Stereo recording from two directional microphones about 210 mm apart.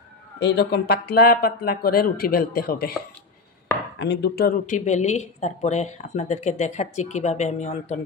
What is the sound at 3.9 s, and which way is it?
Speech, 55° left (ahead or behind).